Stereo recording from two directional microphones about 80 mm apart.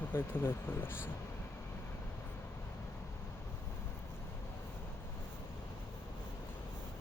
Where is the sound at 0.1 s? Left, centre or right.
Left.